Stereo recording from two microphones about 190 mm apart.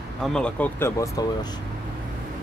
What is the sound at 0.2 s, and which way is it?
Speech, 5° left (ahead or behind).